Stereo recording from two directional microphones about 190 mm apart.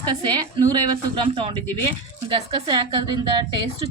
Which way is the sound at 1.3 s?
30° right (ahead or behind).